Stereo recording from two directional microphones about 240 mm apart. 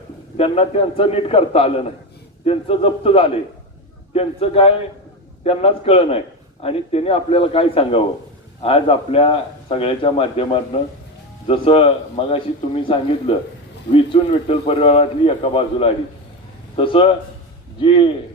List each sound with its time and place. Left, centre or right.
0.3 s a man's voice: left